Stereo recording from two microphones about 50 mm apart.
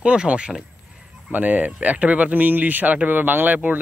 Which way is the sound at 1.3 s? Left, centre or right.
Right.